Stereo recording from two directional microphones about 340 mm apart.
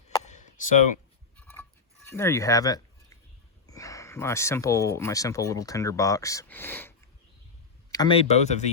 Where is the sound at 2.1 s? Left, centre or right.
Centre.